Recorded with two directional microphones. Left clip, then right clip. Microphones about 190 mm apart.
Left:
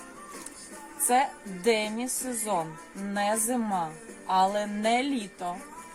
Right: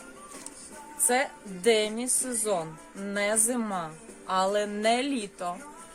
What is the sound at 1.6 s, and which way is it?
Speech, 25° right (ahead or behind).